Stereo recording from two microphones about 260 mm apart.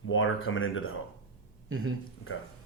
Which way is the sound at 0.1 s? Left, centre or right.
Left.